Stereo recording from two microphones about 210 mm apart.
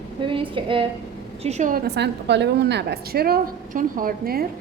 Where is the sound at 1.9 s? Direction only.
55° right (ahead or behind).